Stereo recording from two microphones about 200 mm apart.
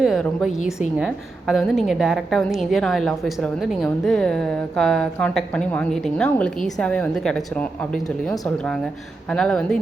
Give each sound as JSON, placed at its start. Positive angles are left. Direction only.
{"t": 0.0, "sound": "a woman's voice", "side_deg": 0}